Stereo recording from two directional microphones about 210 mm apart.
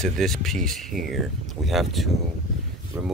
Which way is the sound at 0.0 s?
Centre (ahead or behind).